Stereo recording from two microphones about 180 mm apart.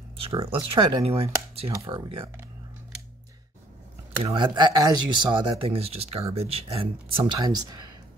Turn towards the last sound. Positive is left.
turn(degrees=-20)  # may be behind; listen again after turning